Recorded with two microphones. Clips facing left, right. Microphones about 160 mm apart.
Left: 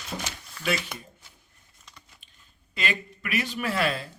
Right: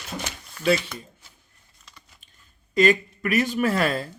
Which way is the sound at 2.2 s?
40° right (ahead or behind).